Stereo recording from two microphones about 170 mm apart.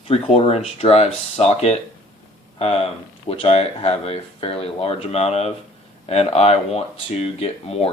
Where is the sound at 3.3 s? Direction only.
35° left (ahead or behind).